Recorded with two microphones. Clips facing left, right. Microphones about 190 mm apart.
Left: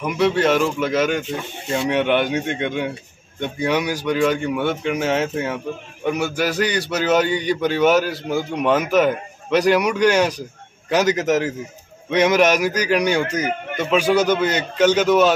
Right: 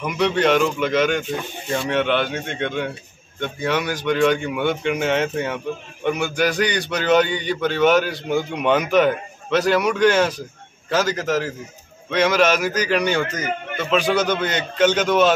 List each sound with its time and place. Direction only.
0.0 s a man's voice: 5° left (ahead or behind)